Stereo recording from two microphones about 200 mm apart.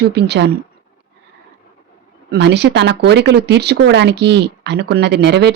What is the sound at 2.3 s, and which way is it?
Speech, 60° right (ahead or behind).